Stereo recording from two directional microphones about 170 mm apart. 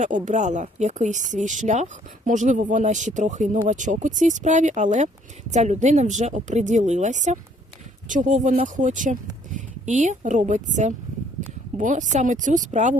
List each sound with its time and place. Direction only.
0.0 s speech: 45° right (ahead or behind)